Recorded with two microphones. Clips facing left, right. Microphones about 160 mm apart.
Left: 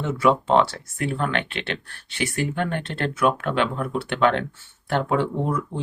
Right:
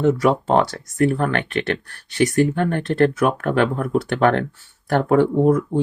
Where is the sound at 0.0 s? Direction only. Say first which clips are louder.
Right 4 dB; 40° right (ahead or behind).